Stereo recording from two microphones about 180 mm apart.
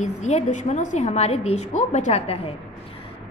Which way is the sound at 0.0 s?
40° left (ahead or behind).